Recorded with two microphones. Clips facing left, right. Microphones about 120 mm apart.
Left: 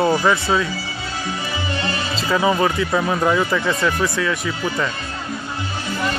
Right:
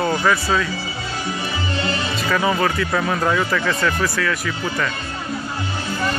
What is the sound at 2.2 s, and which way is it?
Speech, 20° left (ahead or behind).